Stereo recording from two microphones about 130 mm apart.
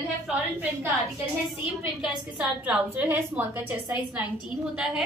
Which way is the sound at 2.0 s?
10° right (ahead or behind).